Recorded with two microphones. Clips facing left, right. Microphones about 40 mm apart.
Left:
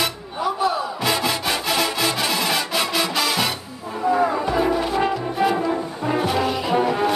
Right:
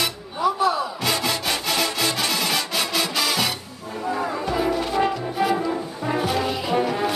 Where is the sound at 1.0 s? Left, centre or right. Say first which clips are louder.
Left 3 dB; centre.